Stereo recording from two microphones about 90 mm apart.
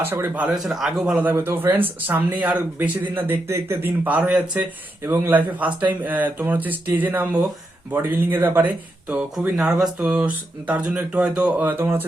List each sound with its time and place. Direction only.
0.0 s speech: 25° right (ahead or behind)
0.4 s a man's voice: 5° right (ahead or behind)
1.2 s speech: 25° right (ahead or behind)
5.0 s speech: 25° right (ahead or behind)